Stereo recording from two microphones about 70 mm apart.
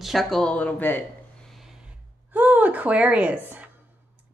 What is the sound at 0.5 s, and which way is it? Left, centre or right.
Speech, left.